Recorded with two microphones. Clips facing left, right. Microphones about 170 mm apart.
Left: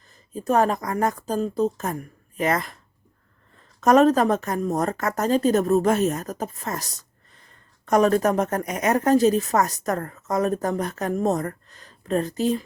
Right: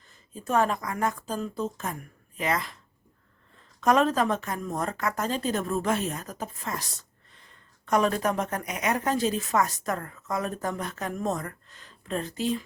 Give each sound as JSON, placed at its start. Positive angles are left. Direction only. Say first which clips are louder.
{"t": 0.3, "sound": "a woman's voice", "louder": "left 5 dB", "side_deg": 40}
{"t": 3.8, "sound": "a woman's voice", "louder": "left 6 dB", "side_deg": 45}